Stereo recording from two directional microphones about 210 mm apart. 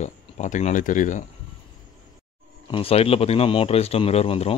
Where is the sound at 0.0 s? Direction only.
35° left (ahead or behind).